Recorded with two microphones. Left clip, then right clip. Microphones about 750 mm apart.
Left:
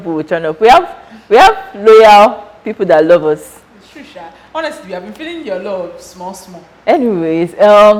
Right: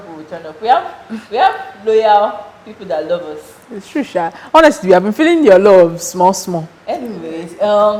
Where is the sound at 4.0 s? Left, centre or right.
Right.